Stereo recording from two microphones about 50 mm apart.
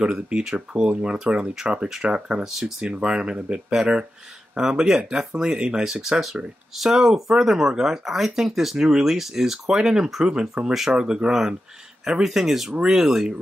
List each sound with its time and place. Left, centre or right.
0.0 s speech: centre